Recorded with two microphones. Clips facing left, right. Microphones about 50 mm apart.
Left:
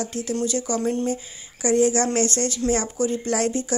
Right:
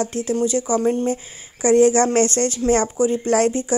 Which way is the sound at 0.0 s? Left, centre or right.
Right.